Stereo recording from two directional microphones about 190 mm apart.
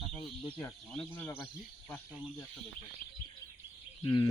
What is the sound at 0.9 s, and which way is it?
Speech, 5° left (ahead or behind).